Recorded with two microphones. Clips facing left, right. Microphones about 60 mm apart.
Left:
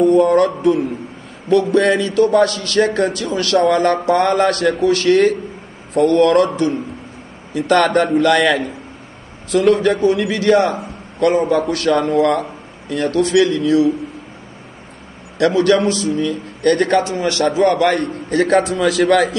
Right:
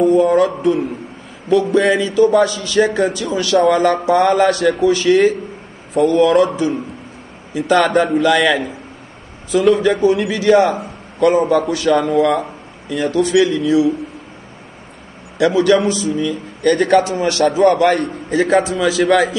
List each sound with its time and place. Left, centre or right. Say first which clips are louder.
0.0 s a man's voice: even; centre
11.4 s a man's voice: right 1 dB; centre
15.3 s a man's voice: right 1 dB; centre
17.2 s a man's voice: right 2 dB; right
18.3 s a man's voice: even; centre